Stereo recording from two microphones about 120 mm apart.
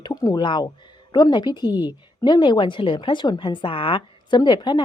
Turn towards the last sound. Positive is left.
turn(degrees=40)  # may be behind; listen again after turning